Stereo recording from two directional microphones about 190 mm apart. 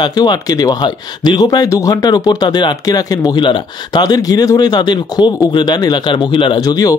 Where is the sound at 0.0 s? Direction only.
20° left (ahead or behind).